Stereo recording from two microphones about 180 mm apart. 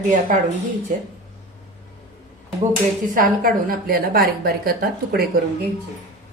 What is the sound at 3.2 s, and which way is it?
A woman's voice, 55° right (ahead or behind).